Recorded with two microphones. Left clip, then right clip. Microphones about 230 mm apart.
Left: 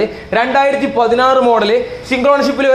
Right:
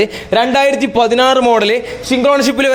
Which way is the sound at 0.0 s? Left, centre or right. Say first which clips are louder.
Right 2 dB; right.